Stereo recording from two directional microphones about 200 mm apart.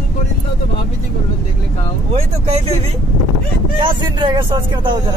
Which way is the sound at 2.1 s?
30° right (ahead or behind).